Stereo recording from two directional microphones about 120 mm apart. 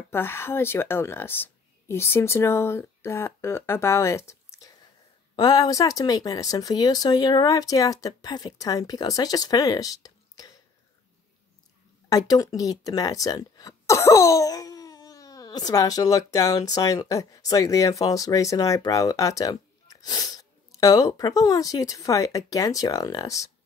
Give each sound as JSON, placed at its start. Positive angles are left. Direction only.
{"t": 0.1, "sound": "speech", "side_deg": 20}
{"t": 12.1, "sound": "speech", "side_deg": 30}